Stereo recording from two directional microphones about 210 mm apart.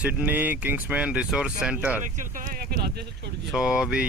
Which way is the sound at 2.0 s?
40° right (ahead or behind).